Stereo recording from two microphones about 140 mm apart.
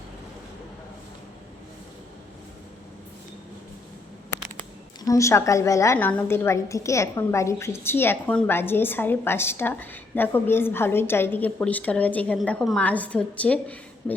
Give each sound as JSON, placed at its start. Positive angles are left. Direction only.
{"t": 5.0, "sound": "a woman's voice", "side_deg": 20}